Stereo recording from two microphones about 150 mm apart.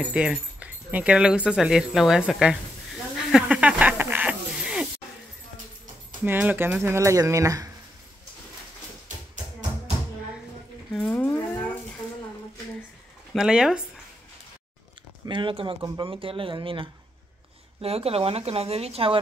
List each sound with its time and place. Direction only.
0.0 s speech: 5° right (ahead or behind)
3.2 s a sound: 5° right (ahead or behind)
6.2 s speech: 10° right (ahead or behind)
10.9 s speech: 10° left (ahead or behind)
13.3 s speech: 5° right (ahead or behind)
15.2 s speech: 35° right (ahead or behind)